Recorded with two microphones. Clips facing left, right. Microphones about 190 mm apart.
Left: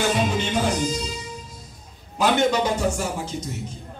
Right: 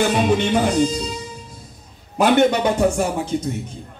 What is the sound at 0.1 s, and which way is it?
Speech, 60° right (ahead or behind).